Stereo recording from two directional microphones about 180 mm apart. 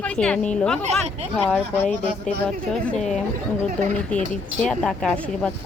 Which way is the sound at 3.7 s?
45° right (ahead or behind).